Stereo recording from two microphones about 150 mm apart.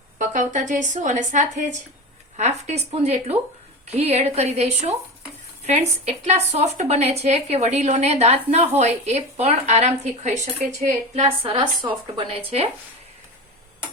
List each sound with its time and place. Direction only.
0.2 s a woman's voice: 55° right (ahead or behind); by 11.7 s 40° right (ahead or behind)